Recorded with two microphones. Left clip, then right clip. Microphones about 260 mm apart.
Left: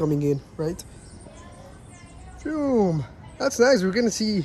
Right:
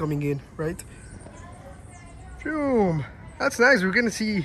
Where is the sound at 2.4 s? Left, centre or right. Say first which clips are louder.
Even; centre.